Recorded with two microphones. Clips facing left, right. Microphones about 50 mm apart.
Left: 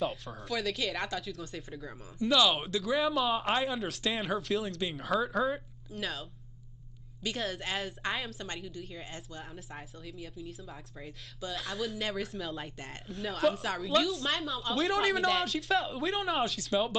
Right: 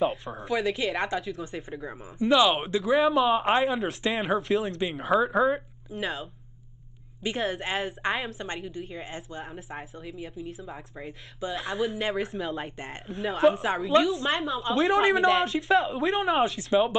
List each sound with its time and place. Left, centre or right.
0.0 s a woman's voice: right
3.6 s a woman's voice: centre
7.2 s a woman's voice: right
12.7 s a woman's voice: right